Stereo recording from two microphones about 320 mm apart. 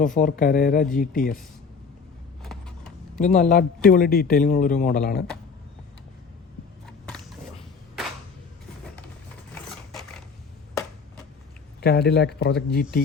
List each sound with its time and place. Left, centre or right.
0.0 s speech: left
2.4 s vehicle: centre
3.2 s speech: left
7.0 s a sound: centre
9.6 s a sound: centre
11.8 s speech: left